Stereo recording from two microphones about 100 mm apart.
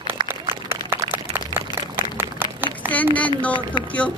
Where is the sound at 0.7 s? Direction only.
20° right (ahead or behind).